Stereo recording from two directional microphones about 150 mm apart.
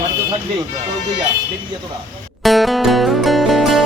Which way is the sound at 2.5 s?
Centre (ahead or behind).